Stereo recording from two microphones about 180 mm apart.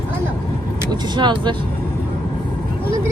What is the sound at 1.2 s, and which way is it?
Speech, 25° right (ahead or behind).